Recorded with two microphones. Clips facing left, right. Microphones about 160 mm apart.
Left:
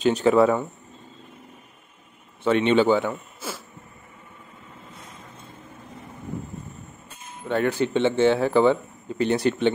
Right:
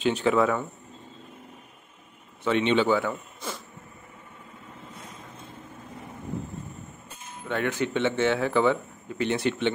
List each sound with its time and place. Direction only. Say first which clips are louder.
0.0 s speech: left 5 dB; 40° left (ahead or behind)
2.4 s speech: left 4 dB; 45° left (ahead or behind)
3.1 s wheeze: left 1 dB; 5° left (ahead or behind)
7.4 s speech: left 5 dB; 35° left (ahead or behind)